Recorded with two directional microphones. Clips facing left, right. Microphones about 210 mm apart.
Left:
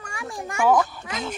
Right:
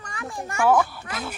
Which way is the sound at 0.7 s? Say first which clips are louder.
Even; 10° right (ahead or behind).